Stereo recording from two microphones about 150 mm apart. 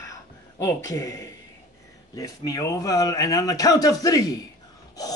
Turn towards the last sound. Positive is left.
turn(degrees=25)  # may be behind; listen again after turning